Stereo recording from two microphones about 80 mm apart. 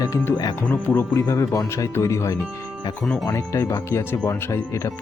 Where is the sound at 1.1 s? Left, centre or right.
Left.